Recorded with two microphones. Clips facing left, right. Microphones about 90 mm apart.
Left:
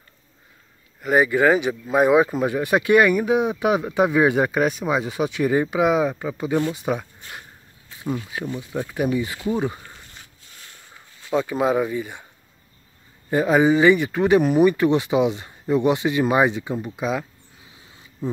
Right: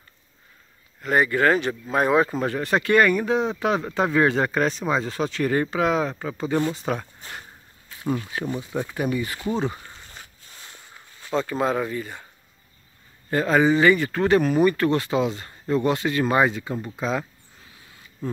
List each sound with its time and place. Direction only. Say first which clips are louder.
1.0 s speech: left 3 dB; 15° left (ahead or behind)
11.2 s speech: left 3 dB; 5° left (ahead or behind)
13.3 s speech: left 2 dB; 10° left (ahead or behind)
17.6 s a sound: left 1 dB; 20° left (ahead or behind)